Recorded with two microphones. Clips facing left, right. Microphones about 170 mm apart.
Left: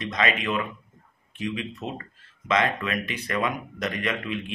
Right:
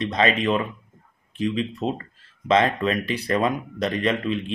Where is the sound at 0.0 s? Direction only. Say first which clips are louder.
Right 5 dB; 35° right (ahead or behind).